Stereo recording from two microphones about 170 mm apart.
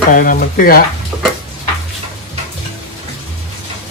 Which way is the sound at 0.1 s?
55° left (ahead or behind).